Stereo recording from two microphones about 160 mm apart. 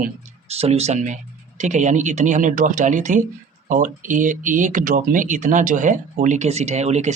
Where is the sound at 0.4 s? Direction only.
40° right (ahead or behind).